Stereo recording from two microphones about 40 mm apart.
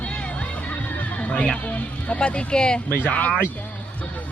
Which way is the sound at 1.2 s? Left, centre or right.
Left.